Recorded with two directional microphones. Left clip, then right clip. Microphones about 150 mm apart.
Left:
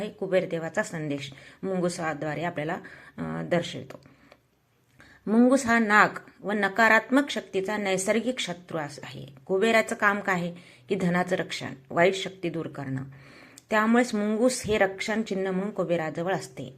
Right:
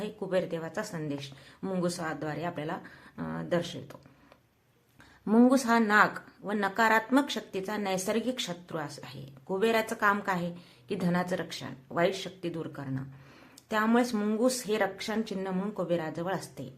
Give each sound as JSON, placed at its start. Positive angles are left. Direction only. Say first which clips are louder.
{"t": 0.0, "sound": "speech", "louder": "left 5 dB", "side_deg": 10}
{"t": 5.2, "sound": "speech", "louder": "left 2 dB", "side_deg": 0}
{"t": 5.5, "sound": "speech", "louder": "left 3 dB", "side_deg": 10}